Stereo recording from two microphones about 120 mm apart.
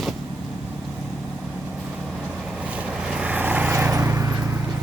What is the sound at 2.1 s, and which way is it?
Vehicle, 10° right (ahead or behind).